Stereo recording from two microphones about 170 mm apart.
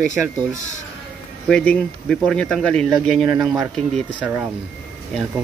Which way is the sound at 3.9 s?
10° right (ahead or behind).